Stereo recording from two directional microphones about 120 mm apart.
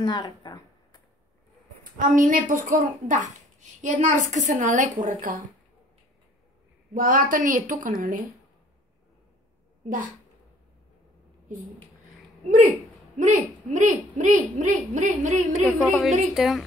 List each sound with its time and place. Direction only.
0.0 s speech: 35° left (ahead or behind)
2.0 s a woman's voice: 90° right
6.9 s a woman's voice: 90° right
13.2 s a woman's voice: 90° right
15.6 s a woman's voice: centre (ahead or behind)